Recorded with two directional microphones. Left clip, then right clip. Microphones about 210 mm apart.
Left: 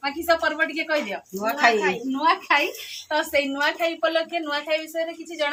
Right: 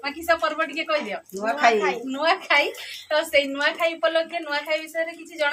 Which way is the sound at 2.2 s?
40° right (ahead or behind).